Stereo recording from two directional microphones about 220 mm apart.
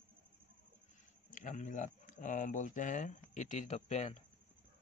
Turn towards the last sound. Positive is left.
turn(degrees=30)  # may be behind; listen again after turning